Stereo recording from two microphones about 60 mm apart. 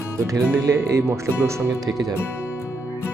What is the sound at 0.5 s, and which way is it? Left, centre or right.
Speech, right.